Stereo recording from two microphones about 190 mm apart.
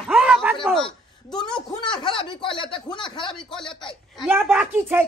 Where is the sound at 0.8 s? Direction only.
20° left (ahead or behind).